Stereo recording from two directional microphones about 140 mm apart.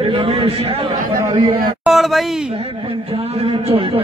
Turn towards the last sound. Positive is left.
turn(degrees=-45)  # may be behind; listen again after turning